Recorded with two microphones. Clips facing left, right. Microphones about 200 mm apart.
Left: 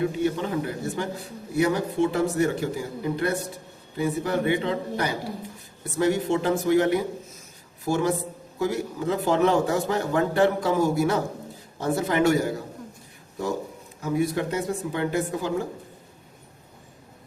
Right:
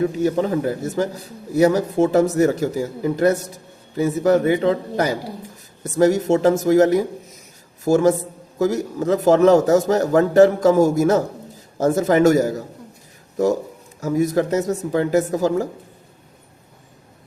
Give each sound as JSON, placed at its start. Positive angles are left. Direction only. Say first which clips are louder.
{"t": 0.2, "sound": "a man's voice", "louder": "right 6 dB", "side_deg": -40}
{"t": 14.0, "sound": "a man's voice", "louder": "right 6 dB", "side_deg": -40}